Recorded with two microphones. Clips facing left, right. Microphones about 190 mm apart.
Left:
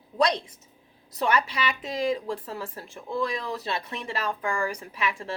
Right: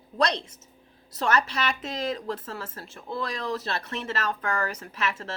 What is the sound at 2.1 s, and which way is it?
A woman's voice, 15° left (ahead or behind).